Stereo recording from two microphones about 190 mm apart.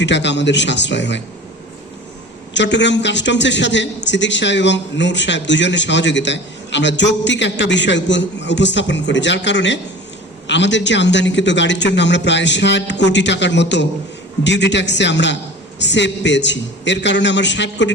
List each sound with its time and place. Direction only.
0.0 s a man's voice: 70° left (ahead or behind)
2.5 s a man's voice: 70° left (ahead or behind)